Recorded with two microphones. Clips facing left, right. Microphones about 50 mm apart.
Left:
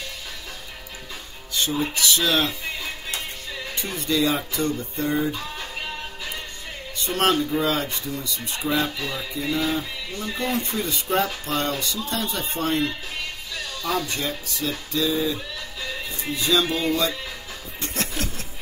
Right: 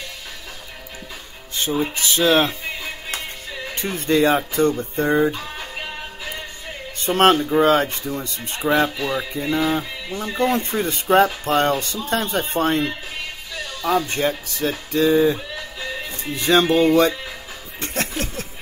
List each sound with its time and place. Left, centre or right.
1.7 s speech: right
3.7 s speech: right
5.3 s music: centre
7.0 s speech: right
8.9 s speech: centre
9.3 s speech: right
13.9 s speech: right
15.3 s music: centre
16.3 s speech: right